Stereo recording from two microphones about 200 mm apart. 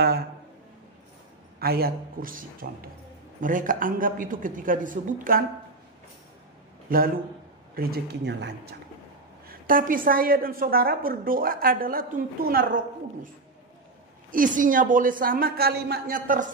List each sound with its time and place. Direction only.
1.6 s a woman's voice: 50° right (ahead or behind)
6.9 s a woman's voice: 45° right (ahead or behind)
9.5 s a woman's voice: 45° right (ahead or behind)
14.3 s a woman's voice: 40° right (ahead or behind)